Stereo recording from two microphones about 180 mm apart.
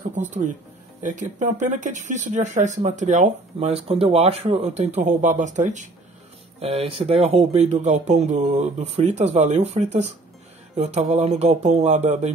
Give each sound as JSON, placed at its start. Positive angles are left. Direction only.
{"t": 0.1, "sound": "speech", "side_deg": -45}
{"t": 6.6, "sound": "speech", "side_deg": -30}